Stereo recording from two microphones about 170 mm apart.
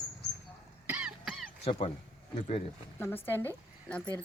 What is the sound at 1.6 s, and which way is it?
Speech, 35° left (ahead or behind).